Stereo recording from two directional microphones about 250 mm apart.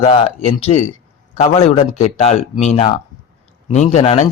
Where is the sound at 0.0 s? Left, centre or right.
Left.